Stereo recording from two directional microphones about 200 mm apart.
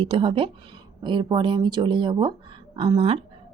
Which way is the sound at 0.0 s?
25° right (ahead or behind).